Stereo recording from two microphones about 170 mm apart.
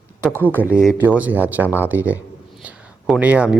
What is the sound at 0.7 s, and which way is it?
Speech, 5° right (ahead or behind).